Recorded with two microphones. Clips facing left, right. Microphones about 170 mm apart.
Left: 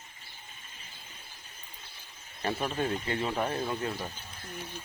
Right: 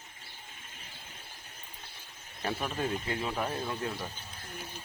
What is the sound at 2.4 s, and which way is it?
Speech, centre (ahead or behind).